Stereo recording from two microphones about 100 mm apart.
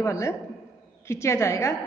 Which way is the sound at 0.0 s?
30° left (ahead or behind).